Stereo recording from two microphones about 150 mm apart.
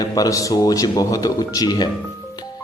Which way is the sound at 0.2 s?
20° left (ahead or behind).